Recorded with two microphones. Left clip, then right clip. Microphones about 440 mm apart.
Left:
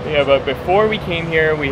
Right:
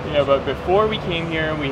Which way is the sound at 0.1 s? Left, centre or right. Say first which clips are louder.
Left 3 dB; right.